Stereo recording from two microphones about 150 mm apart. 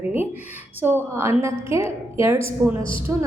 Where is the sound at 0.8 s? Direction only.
15° right (ahead or behind).